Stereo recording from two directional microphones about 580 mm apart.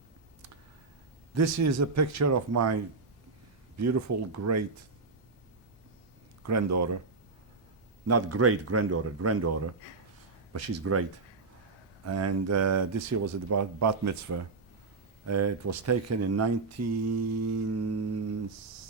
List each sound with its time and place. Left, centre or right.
1.4 s speech: right
3.8 s speech: right
6.4 s speech: right
8.0 s speech: right
12.0 s speech: right